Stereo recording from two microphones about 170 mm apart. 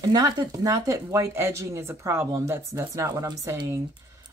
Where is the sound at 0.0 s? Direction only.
25° right (ahead or behind).